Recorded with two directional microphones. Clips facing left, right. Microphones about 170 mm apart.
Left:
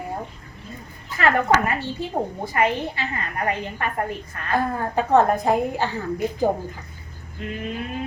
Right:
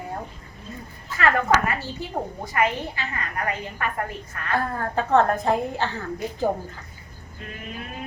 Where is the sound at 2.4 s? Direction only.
25° left (ahead or behind).